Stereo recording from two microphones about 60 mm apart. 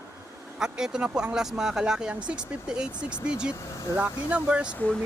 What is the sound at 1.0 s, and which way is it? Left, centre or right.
Speech, centre.